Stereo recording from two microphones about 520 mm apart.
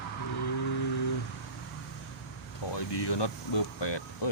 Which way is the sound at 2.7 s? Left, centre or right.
Left.